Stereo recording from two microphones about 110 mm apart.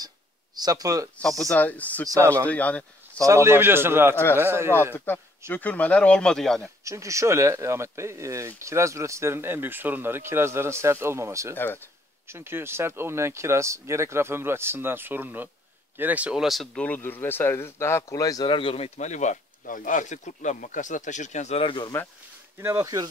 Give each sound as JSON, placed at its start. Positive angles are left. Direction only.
{"t": 0.6, "sound": "speech", "side_deg": -35}
{"t": 1.4, "sound": "speech", "side_deg": 10}
{"t": 2.0, "sound": "speech", "side_deg": -30}
{"t": 2.4, "sound": "speech", "side_deg": 15}
{"t": 3.3, "sound": "speech", "side_deg": -25}
{"t": 4.9, "sound": "speech", "side_deg": 20}
{"t": 6.8, "sound": "speech", "side_deg": -30}
{"t": 11.5, "sound": "speech", "side_deg": 20}
{"t": 12.3, "sound": "speech", "side_deg": -20}
{"t": 16.8, "sound": "speech", "side_deg": 15}
{"t": 18.5, "sound": "speech", "side_deg": 55}
{"t": 21.6, "sound": "speech", "side_deg": 45}
{"t": 22.6, "sound": "speech", "side_deg": -25}